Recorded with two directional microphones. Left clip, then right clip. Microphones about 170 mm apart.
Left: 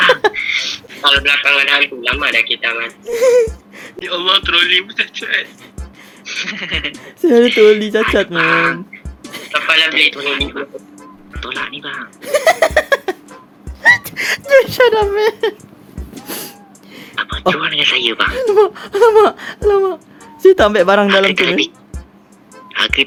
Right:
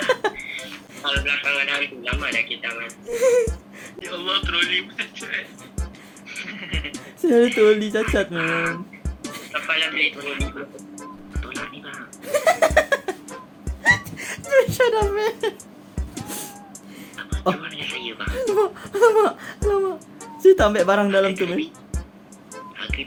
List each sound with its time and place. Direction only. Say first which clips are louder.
0.0 s a sound: left 11 dB; 85° left
1.0 s a man's voice: left 11 dB; 70° left (ahead or behind)
6.2 s sheep: left 11 dB; 60° left (ahead or behind)
7.0 s speech: left 6 dB; 85° left
7.4 s speech: left 7 dB; 60° left (ahead or behind); by 8.2 s 90° left
8.3 s a man's voice: left 10 dB; 65° left (ahead or behind)
9.3 s a man's voice: left 10 dB; 75° left (ahead or behind); by 10.4 s 55° left (ahead or behind)
11.6 s speech: left 10 dB; 60° left (ahead or behind); by 15.5 s 90° left
17.4 s speech: left 11 dB; 90° left
22.7 s speech: left 16 dB; 90° left